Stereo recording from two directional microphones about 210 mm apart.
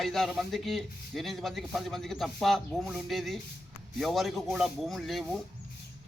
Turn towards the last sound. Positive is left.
turn(degrees=0)  # may be behind; listen again after turning